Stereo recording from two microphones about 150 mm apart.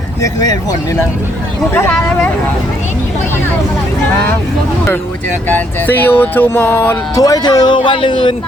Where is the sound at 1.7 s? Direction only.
10° left (ahead or behind).